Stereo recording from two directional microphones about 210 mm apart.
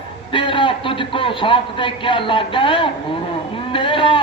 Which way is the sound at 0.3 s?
25° left (ahead or behind).